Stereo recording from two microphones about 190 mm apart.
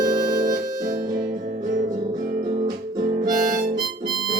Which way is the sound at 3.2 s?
45° right (ahead or behind).